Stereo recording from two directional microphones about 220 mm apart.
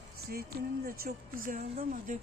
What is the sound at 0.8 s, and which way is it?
Speech, 40° right (ahead or behind).